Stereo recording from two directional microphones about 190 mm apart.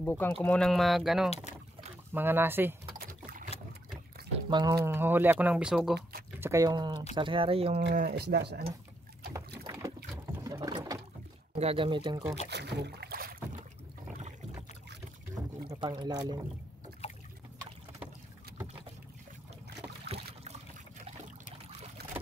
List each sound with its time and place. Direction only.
0.0 s speech: 10° left (ahead or behind); by 2.7 s 10° right (ahead or behind)
4.5 s speech: 20° right (ahead or behind); by 5.9 s 5° right (ahead or behind)
6.4 s speech: 15° right (ahead or behind)
7.9 s speech: 50° right (ahead or behind)
9.7 s boat: 15° right (ahead or behind)
10.4 s a sound: 20° right (ahead or behind)
11.5 s speech: 30° right (ahead or behind)
12.4 s boat: 65° right (ahead or behind)
15.7 s speech: 25° right (ahead or behind)